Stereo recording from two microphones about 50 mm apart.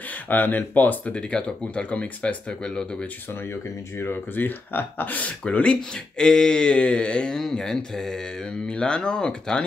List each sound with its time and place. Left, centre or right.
0.1 s speech: left; by 3.1 s centre
3.3 s speech: left
5.5 s speech: centre